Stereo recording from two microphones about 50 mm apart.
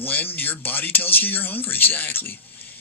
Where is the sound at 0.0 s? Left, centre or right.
Left.